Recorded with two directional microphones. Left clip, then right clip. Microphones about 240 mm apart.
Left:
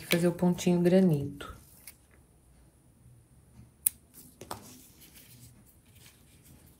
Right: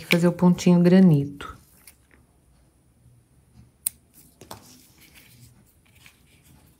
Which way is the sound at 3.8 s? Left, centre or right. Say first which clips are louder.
Right 1 dB; centre.